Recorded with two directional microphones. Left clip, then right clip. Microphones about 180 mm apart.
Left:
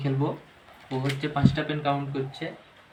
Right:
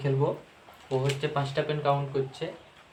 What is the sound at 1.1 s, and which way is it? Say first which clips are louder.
Speech: left 1 dB; 45° right (ahead or behind).